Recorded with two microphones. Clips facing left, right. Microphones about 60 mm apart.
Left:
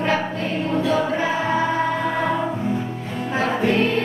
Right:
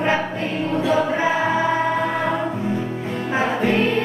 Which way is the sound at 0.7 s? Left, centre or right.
Centre.